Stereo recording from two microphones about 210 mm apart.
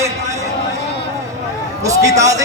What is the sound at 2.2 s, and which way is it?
Speech, 15° right (ahead or behind).